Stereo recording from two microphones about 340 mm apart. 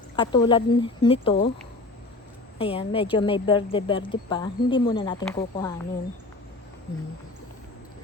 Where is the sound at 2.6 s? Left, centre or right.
Centre.